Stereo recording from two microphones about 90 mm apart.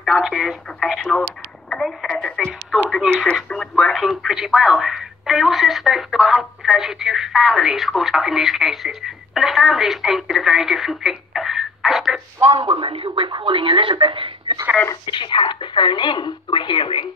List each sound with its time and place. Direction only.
0.0 s speech: centre (ahead or behind)
12.4 s speech: 75° right (ahead or behind)
15.0 s speech: 60° left (ahead or behind)